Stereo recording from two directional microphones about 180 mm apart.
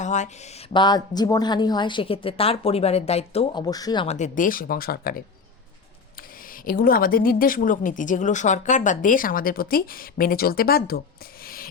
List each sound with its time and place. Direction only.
0.0 s speech: 40° left (ahead or behind); by 4.0 s 20° left (ahead or behind)
4.0 s speech: 40° left (ahead or behind)